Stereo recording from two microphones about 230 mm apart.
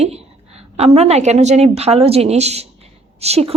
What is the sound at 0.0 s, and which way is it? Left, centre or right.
A woman's voice, right.